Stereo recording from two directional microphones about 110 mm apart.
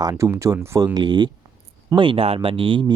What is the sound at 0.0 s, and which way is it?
Speech, 35° right (ahead or behind).